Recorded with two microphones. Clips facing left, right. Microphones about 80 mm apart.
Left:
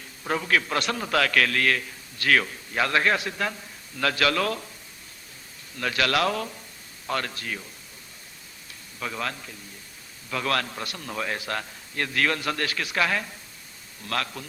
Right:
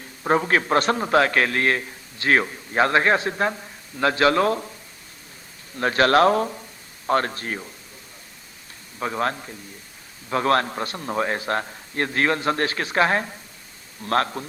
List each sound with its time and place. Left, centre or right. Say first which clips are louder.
0.0 s a man's voice: right 8 dB; right
5.7 s a man's voice: right 7 dB; right
9.0 s a man's voice: right 7 dB; right